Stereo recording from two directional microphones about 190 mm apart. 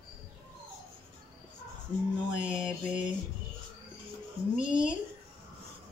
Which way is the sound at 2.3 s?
5° right (ahead or behind).